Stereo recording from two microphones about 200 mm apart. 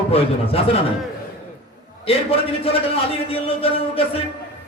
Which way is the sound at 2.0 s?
30° left (ahead or behind).